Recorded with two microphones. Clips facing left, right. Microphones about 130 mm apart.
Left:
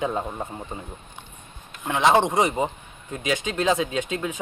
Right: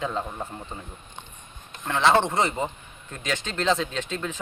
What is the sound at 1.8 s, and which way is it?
Speech, 15° left (ahead or behind).